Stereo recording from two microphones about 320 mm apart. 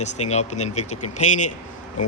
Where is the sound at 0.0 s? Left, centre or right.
Left.